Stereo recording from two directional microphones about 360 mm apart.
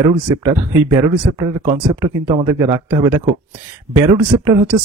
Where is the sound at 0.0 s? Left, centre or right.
Centre.